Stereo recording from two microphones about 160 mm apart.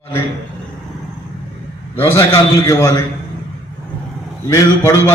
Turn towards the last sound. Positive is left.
turn(degrees=20)  # may be behind; listen again after turning